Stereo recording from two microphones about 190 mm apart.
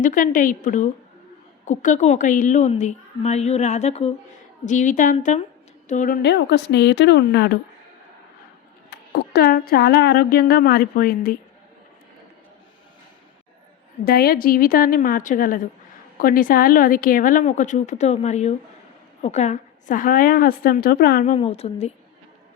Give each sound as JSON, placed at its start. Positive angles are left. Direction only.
{"t": 0.0, "sound": "a woman's voice", "side_deg": 45}
{"t": 6.2, "sound": "speech", "side_deg": 65}
{"t": 8.9, "sound": "speech", "side_deg": 55}
{"t": 14.0, "sound": "speech", "side_deg": 55}
{"t": 21.3, "sound": "a woman's voice", "side_deg": 35}